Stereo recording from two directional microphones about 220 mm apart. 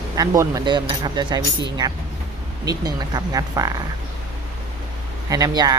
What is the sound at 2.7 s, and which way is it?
Speech, 15° right (ahead or behind).